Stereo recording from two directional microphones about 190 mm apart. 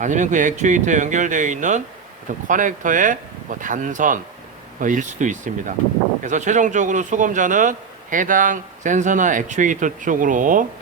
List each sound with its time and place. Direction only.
0.0 s a man's voice: 40° right (ahead or behind)